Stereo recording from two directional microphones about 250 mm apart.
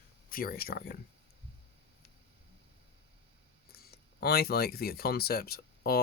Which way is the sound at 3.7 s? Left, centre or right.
Left.